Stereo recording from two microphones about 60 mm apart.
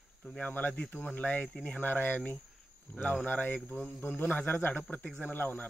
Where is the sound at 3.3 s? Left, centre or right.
Left.